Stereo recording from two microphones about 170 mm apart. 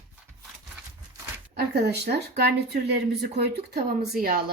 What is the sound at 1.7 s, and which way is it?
Speech, 75° right (ahead or behind).